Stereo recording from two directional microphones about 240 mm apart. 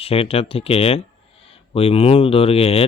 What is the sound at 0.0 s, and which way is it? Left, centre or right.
Speech, left.